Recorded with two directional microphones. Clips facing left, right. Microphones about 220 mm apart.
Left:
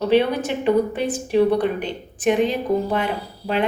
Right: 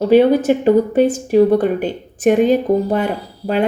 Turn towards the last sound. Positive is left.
turn(degrees=-45)  # may be behind; listen again after turning